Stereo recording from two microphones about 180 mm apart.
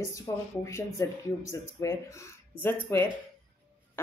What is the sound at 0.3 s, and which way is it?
Speech, 20° left (ahead or behind).